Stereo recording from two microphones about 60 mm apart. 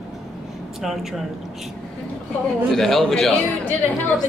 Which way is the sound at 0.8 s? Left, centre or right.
Centre.